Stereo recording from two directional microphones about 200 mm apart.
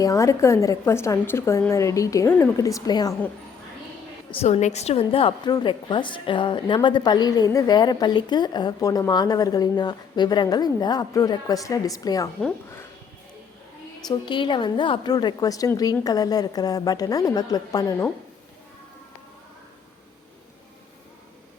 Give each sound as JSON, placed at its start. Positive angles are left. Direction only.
{"t": 0.0, "sound": "a woman's voice", "side_deg": 15}
{"t": 4.3, "sound": "a woman's voice", "side_deg": 30}
{"t": 14.1, "sound": "a woman's voice", "side_deg": 25}